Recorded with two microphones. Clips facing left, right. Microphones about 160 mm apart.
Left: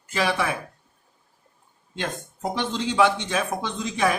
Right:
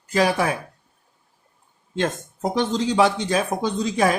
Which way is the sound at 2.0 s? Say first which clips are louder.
Right 6 dB; 40° right (ahead or behind).